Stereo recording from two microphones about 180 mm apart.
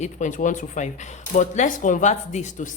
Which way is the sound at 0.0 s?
45° left (ahead or behind).